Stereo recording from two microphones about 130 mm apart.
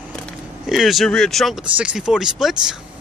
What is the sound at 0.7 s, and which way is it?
Speech, centre (ahead or behind).